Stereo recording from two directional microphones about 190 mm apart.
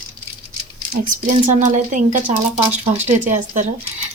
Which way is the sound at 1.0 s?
40° right (ahead or behind).